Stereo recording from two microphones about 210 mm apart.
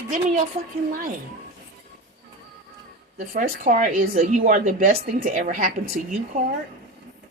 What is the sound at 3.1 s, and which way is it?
A woman's voice, 45° right (ahead or behind).